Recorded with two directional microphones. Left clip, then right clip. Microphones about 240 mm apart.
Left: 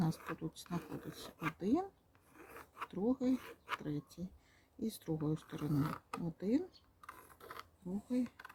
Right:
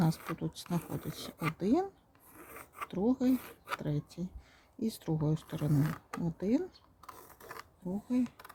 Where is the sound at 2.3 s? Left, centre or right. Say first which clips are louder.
Right 4 dB; centre.